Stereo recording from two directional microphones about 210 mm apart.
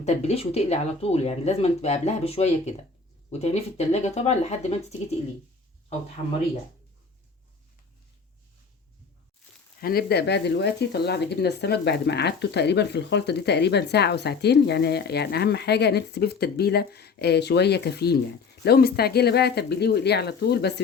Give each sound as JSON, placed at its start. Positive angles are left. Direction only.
{"t": 0.0, "sound": "speech", "side_deg": 30}
{"t": 9.8, "sound": "speech", "side_deg": 50}